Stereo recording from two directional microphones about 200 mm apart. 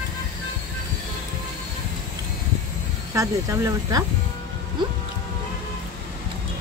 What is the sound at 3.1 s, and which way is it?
Speech, 15° right (ahead or behind).